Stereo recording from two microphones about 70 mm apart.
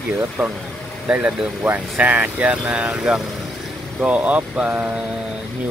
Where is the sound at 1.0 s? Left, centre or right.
Centre.